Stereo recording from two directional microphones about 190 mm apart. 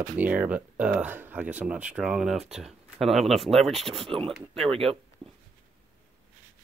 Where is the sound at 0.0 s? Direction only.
10° right (ahead or behind).